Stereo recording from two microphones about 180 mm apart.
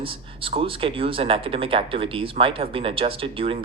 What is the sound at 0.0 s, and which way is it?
Speech, 30° right (ahead or behind).